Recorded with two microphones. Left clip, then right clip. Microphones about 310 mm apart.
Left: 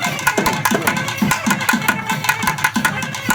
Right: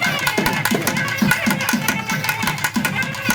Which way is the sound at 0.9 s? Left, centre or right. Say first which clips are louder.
Left 1 dB; centre.